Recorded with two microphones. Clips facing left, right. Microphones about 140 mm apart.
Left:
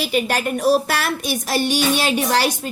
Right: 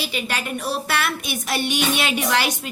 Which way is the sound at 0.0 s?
45° left (ahead or behind).